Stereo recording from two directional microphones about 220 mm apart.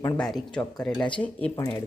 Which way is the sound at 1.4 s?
15° left (ahead or behind).